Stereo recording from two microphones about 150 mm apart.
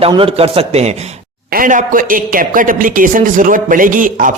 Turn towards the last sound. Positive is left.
turn(degrees=-65)  # may be behind; listen again after turning